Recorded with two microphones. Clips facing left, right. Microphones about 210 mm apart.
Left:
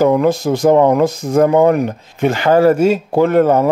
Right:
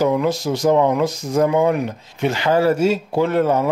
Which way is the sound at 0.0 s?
50° left (ahead or behind).